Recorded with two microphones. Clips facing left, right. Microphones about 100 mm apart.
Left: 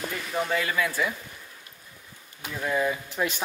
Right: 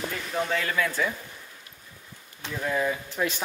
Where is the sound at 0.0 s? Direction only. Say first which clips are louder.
Even; centre (ahead or behind).